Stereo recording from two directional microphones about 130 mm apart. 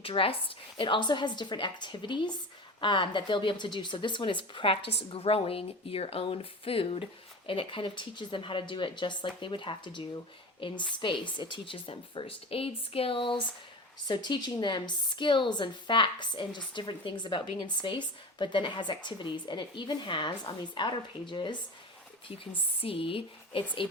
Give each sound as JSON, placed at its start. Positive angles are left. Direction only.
{"t": 0.0, "sound": "speech", "side_deg": 45}
{"t": 22.8, "sound": "speech", "side_deg": 45}